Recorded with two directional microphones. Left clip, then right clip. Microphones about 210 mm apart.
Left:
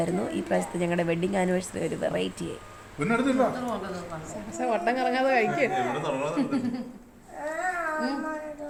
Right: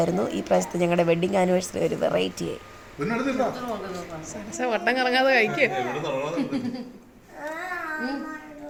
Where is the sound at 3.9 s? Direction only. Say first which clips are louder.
Right 1 dB; 10° right (ahead or behind).